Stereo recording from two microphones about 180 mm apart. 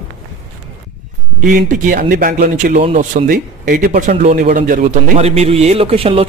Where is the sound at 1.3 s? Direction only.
45° right (ahead or behind).